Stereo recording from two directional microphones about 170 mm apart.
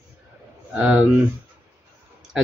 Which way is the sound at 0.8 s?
5° right (ahead or behind).